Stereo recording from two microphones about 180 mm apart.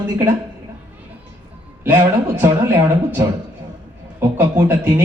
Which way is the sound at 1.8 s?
10° right (ahead or behind).